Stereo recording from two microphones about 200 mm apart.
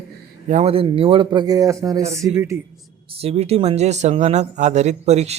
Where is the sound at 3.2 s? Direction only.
30° right (ahead or behind).